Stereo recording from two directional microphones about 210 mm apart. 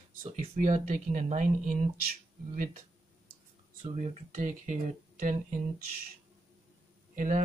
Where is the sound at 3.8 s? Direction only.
35° right (ahead or behind).